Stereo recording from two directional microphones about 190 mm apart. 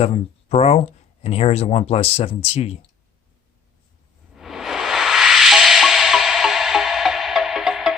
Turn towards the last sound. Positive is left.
turn(degrees=0)  # may be behind; listen again after turning